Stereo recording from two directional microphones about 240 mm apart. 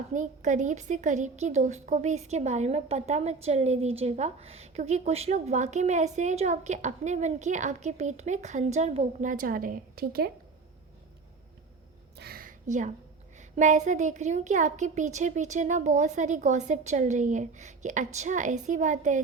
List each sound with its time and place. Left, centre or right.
0.1 s a woman's voice: right
12.1 s a sound: right
13.6 s speech: right